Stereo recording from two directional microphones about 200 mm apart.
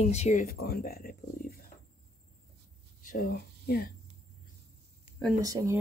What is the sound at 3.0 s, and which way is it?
Speech, 45° left (ahead or behind).